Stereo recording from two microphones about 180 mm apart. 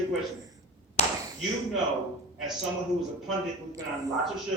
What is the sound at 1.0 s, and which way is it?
Tap, 35° left (ahead or behind).